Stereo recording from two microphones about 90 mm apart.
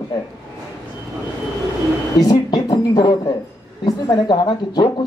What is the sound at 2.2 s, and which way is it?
A man's voice, 50° left (ahead or behind).